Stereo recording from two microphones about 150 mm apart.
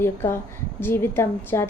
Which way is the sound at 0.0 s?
15° left (ahead or behind).